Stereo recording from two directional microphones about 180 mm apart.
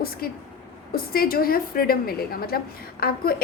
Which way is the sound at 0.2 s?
55° left (ahead or behind).